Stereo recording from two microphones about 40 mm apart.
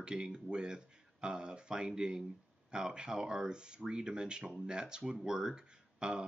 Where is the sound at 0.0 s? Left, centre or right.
Centre.